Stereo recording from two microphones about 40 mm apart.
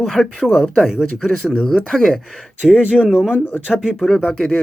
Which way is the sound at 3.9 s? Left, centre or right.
Centre.